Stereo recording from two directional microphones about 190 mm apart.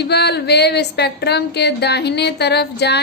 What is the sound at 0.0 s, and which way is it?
Speech, 60° left (ahead or behind).